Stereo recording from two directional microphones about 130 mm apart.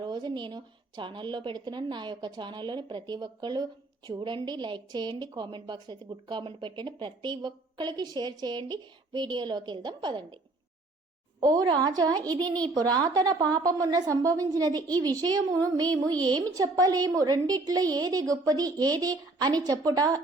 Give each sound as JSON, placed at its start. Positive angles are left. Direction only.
{"t": 0.0, "sound": "speech", "side_deg": -35}
{"t": 11.3, "sound": "a woman's voice", "side_deg": -30}